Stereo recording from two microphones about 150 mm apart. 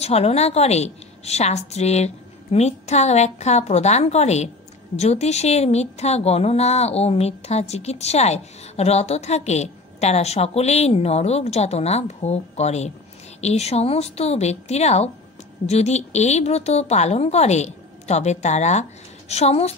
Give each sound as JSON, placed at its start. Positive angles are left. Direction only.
{"t": 0.0, "sound": "a woman's voice", "side_deg": 45}